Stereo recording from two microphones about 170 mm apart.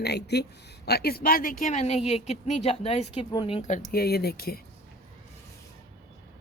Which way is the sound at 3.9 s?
65° left (ahead or behind).